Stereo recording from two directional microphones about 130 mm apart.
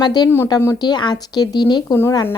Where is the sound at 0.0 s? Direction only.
30° left (ahead or behind).